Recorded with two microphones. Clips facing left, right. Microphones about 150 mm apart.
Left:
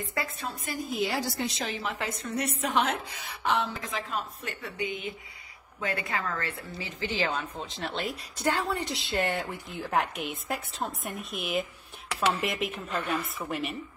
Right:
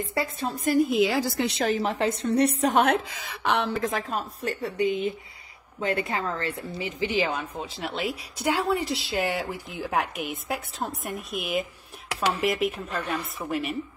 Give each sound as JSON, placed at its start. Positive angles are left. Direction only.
{"t": 0.1, "sound": "a woman's voice", "side_deg": -30}
{"t": 0.8, "sound": "a woman's voice", "side_deg": -85}
{"t": 1.6, "sound": "a woman's voice", "side_deg": -40}
{"t": 2.8, "sound": "a woman's voice", "side_deg": -75}
{"t": 6.8, "sound": "a woman's voice", "side_deg": -15}